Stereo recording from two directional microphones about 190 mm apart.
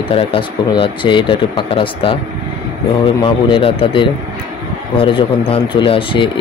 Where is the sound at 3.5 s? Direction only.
30° left (ahead or behind).